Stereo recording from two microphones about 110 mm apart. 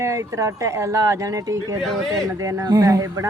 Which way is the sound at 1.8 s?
Centre (ahead or behind).